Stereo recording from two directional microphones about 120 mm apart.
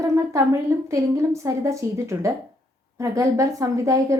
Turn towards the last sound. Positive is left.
turn(degrees=-25)  # may be behind; listen again after turning